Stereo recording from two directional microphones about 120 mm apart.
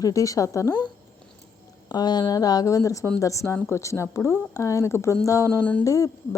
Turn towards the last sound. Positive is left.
turn(degrees=30)  # may be behind; listen again after turning